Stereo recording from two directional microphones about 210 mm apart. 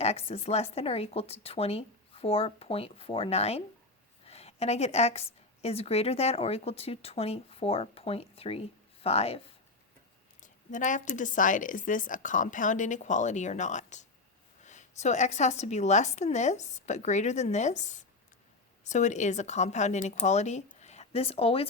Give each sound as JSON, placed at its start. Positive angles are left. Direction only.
{"t": 0.0, "sound": "a woman's voice", "side_deg": 30}
{"t": 10.4, "sound": "speech", "side_deg": 35}